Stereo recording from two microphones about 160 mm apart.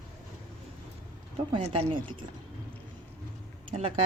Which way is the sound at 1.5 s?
35° right (ahead or behind).